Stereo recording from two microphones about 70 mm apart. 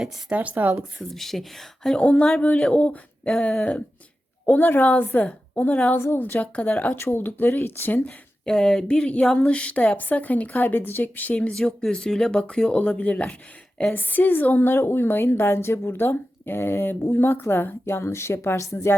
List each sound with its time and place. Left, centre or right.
0.0 s speech: centre
0.9 s a woman's voice: centre; by 6.0 s left
6.1 s a woman's voice: left
6.4 s speech: left
6.9 s speech: left
8.4 s speech: centre; by 11.3 s left
11.5 s a woman's voice: centre; by 18.9 s left